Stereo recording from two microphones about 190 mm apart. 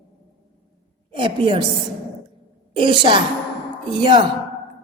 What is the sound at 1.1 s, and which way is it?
Speech, 25° right (ahead or behind).